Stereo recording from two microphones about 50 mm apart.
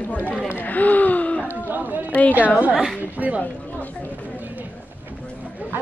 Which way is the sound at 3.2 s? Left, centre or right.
Right.